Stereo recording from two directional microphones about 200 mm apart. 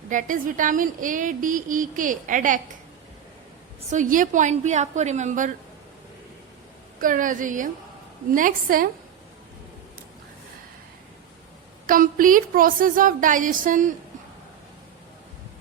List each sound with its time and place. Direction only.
0.1 s a woman's voice: 40° right (ahead or behind)
3.9 s a woman's voice: 40° right (ahead or behind)
7.0 s a woman's voice: 40° right (ahead or behind)
11.9 s a woman's voice: 45° right (ahead or behind)